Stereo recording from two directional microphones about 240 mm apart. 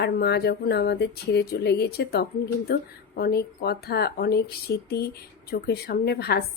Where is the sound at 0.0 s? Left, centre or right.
Left.